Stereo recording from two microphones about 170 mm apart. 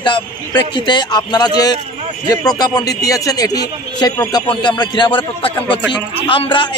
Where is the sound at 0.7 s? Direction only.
25° left (ahead or behind).